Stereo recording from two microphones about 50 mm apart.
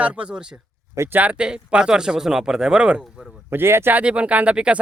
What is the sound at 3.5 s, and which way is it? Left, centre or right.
Speech, right.